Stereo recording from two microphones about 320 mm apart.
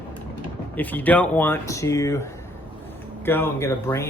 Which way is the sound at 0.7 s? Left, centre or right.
Centre.